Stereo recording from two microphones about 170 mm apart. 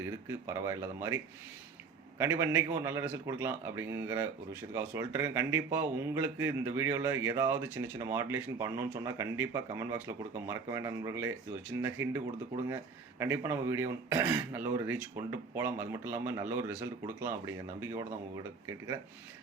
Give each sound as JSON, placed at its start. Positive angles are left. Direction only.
{"t": 0.0, "sound": "a man's voice", "side_deg": -15}